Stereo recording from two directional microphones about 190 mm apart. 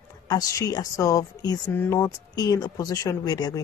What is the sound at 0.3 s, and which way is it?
A woman's voice, 20° left (ahead or behind).